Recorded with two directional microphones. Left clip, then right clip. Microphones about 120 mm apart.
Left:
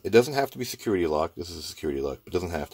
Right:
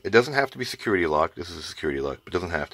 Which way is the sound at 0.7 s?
10° left (ahead or behind).